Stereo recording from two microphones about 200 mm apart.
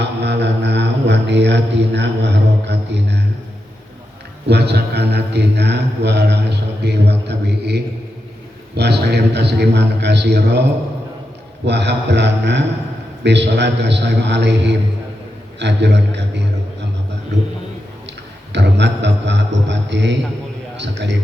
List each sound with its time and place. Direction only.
0.0 s a man's voice: 60° right (ahead or behind)
4.4 s a man's voice: 55° right (ahead or behind)
18.5 s a man's voice: 60° right (ahead or behind)